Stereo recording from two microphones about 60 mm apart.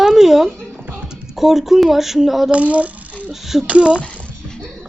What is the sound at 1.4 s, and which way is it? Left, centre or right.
Speech, centre.